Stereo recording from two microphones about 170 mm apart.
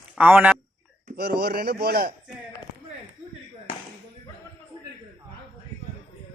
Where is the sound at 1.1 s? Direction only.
70° right (ahead or behind).